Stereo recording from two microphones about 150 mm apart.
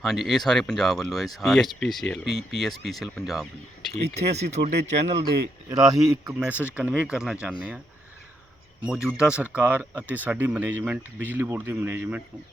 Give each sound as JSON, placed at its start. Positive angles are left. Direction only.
{"t": 0.0, "sound": "speech", "side_deg": 0}
{"t": 3.9, "sound": "speech", "side_deg": -45}
{"t": 5.7, "sound": "speech", "side_deg": -25}
{"t": 6.7, "sound": "speech", "side_deg": -10}
{"t": 8.8, "sound": "speech", "side_deg": -5}